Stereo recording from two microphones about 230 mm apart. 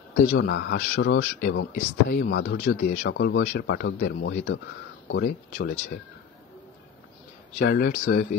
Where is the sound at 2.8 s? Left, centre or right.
Left.